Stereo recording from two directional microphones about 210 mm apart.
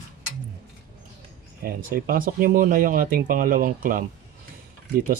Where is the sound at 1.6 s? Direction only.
45° right (ahead or behind).